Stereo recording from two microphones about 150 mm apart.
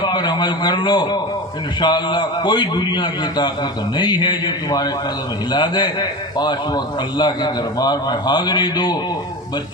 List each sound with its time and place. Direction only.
0.0 s a man's voice: 30° left (ahead or behind)